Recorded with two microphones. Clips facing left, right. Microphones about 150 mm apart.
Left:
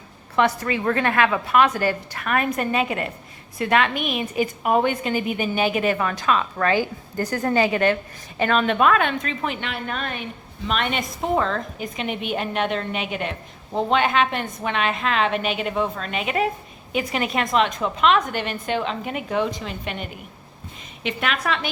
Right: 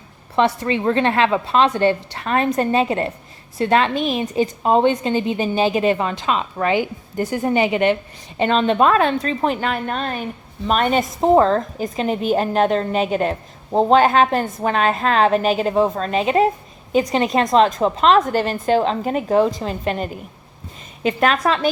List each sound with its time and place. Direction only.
0.3 s a woman's voice: 25° right (ahead or behind)